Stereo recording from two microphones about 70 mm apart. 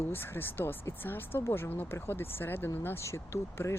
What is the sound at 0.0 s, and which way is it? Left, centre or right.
Speech, left.